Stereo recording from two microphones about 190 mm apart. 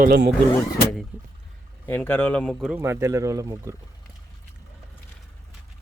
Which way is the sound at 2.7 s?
15° right (ahead or behind).